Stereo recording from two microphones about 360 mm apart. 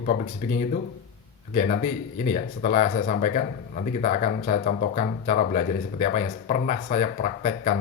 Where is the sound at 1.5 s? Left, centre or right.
Left.